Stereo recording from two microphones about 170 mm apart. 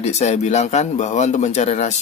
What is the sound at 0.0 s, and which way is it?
Speech, 40° left (ahead or behind).